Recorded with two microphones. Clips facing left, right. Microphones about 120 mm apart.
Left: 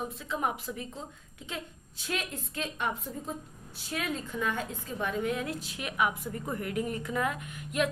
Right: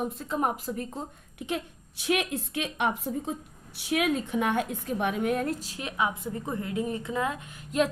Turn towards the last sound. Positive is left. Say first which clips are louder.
# right 4 dB
turn(degrees=-30)  # may be behind; listen again after turning